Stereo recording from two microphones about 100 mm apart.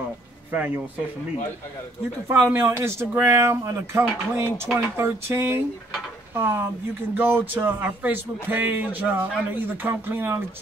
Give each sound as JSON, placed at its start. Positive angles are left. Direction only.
{"t": 0.5, "sound": "speech", "side_deg": -20}
{"t": 2.2, "sound": "speech", "side_deg": -25}